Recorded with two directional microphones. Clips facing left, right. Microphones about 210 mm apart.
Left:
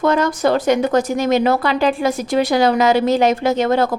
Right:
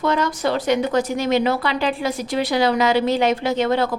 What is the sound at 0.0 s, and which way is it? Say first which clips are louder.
Speech: left 4 dB; 50° left (ahead or behind).